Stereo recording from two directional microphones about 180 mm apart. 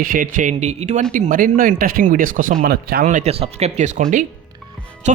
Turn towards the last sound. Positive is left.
turn(degrees=-40)  # may be behind; listen again after turning